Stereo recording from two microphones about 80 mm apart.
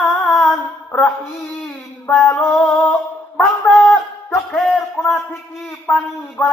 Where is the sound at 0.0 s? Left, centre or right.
Centre.